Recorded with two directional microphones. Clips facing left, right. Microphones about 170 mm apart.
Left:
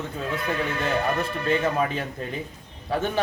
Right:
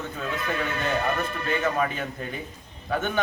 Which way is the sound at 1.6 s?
30° left (ahead or behind).